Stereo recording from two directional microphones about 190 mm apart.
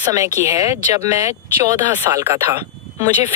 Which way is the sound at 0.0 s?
20° right (ahead or behind).